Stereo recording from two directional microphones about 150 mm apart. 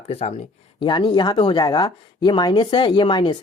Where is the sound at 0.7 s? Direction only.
30° left (ahead or behind).